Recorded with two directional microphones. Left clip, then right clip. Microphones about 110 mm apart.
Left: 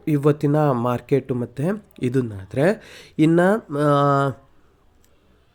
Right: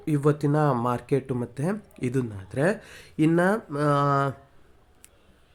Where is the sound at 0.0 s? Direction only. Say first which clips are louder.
Left 5 dB; 15° left (ahead or behind).